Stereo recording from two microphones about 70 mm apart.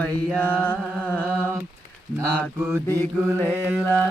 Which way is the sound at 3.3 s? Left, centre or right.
Left.